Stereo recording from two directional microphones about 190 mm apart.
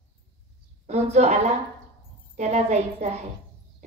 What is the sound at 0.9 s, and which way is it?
A woman's voice, 35° right (ahead or behind).